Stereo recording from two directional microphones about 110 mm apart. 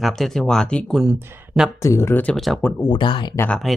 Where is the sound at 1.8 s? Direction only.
25° left (ahead or behind).